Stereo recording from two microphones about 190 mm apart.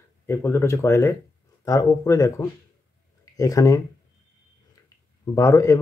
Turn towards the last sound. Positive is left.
turn(degrees=15)  # may be behind; listen again after turning